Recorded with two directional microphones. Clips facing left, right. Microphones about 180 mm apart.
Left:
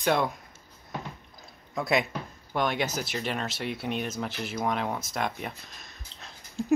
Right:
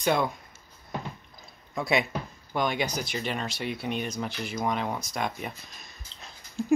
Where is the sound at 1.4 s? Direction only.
Centre (ahead or behind).